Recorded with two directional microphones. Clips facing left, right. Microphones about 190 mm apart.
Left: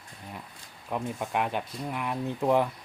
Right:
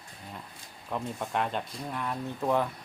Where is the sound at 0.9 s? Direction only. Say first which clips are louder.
Left 2 dB; 10° left (ahead or behind).